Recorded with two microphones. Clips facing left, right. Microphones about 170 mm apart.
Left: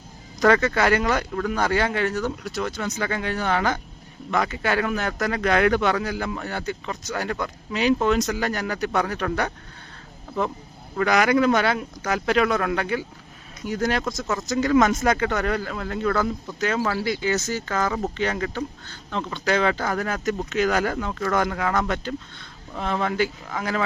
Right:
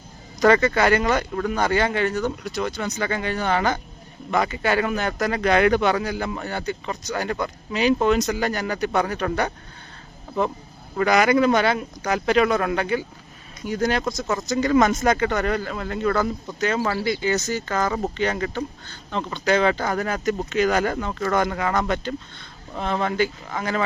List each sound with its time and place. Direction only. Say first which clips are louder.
0.3 s speech: right 2 dB; centre (ahead or behind)
10.9 s speech: right 1 dB; centre (ahead or behind)